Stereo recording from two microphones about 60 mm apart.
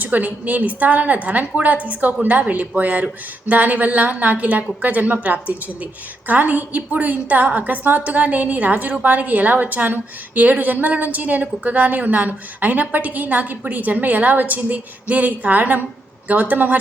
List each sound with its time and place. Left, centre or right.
0.0 s a woman's voice: right